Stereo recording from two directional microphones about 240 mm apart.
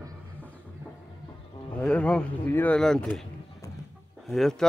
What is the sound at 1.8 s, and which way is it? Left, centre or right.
Speech, centre.